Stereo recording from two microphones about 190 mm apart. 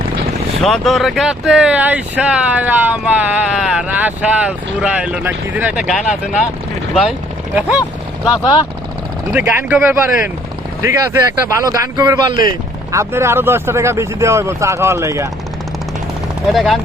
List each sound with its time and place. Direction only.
0.6 s speech: centre (ahead or behind)
9.3 s speech: 10° right (ahead or behind)
16.5 s speech: centre (ahead or behind)